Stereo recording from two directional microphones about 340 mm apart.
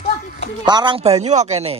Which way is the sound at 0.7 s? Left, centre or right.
Centre.